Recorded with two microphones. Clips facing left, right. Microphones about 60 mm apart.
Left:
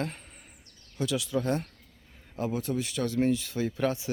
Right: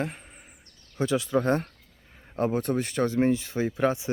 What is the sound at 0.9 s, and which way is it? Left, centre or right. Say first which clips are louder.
Speech: right 5 dB; right.